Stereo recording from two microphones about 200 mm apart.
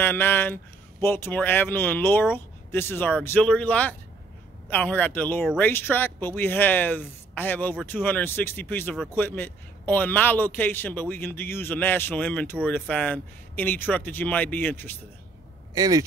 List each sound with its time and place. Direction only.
0.0 s a man's voice: 10° left (ahead or behind)
15.7 s speech: 15° right (ahead or behind)